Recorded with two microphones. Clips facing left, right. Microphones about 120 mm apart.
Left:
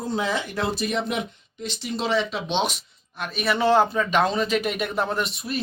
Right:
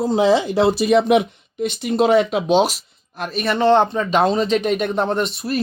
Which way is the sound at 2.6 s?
Centre (ahead or behind).